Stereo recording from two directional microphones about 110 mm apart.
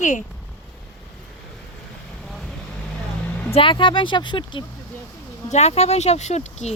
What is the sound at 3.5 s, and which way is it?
Speech, 55° left (ahead or behind).